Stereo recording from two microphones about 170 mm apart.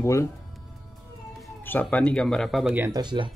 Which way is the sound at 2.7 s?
15° right (ahead or behind).